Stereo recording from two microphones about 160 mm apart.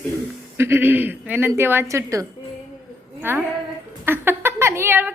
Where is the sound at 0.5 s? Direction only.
15° right (ahead or behind).